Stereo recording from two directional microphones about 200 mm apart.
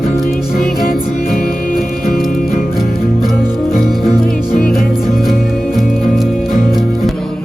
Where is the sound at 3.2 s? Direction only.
Centre (ahead or behind).